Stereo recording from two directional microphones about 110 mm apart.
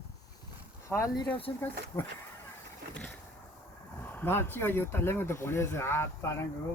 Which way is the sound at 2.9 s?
10° left (ahead or behind).